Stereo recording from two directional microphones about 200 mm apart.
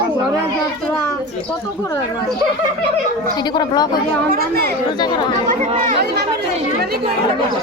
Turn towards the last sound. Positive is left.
turn(degrees=-40)  # may be behind; listen again after turning